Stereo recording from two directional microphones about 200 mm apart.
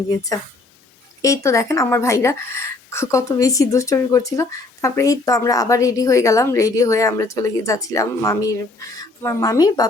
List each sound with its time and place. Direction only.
1.2 s speech: 15° left (ahead or behind)